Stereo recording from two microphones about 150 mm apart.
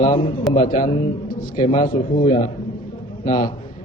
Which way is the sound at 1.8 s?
65° left (ahead or behind).